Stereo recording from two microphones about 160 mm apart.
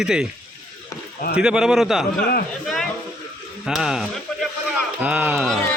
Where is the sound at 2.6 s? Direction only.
Centre (ahead or behind).